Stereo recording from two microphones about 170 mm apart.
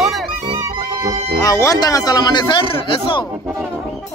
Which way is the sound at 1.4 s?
20° left (ahead or behind).